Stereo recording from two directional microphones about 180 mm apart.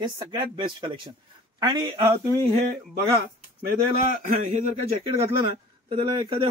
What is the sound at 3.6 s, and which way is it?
A man's voice, 50° right (ahead or behind).